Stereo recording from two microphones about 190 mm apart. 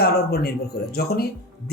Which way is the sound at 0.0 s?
55° left (ahead or behind).